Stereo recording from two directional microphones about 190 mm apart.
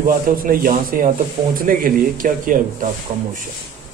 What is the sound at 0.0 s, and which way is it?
Speech, 50° right (ahead or behind).